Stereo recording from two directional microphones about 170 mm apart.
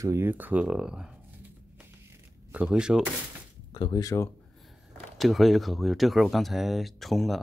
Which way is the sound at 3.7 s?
25° left (ahead or behind).